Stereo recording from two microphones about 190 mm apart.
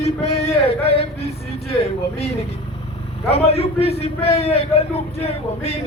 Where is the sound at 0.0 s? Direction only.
35° left (ahead or behind).